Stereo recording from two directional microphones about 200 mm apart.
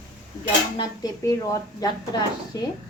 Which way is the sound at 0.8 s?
20° left (ahead or behind).